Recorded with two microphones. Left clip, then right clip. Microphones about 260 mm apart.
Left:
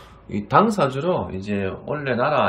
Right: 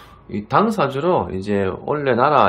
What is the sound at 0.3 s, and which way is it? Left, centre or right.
A man's voice, centre.